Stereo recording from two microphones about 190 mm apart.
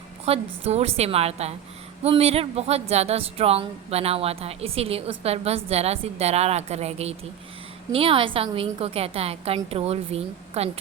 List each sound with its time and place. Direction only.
0.3 s a woman's voice: 30° right (ahead or behind)